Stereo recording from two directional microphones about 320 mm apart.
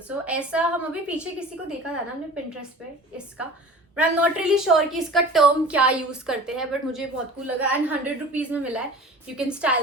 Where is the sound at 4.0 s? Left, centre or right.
Centre.